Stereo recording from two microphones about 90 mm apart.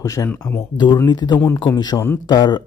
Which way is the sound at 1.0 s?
55° left (ahead or behind).